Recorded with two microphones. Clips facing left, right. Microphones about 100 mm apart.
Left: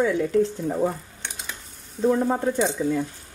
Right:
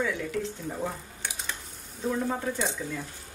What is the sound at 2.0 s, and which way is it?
Speech, 45° left (ahead or behind).